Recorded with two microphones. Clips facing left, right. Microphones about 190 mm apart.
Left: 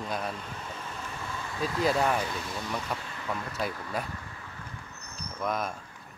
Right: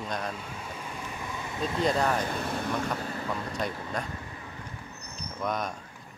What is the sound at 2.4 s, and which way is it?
Speech, 55° right (ahead or behind).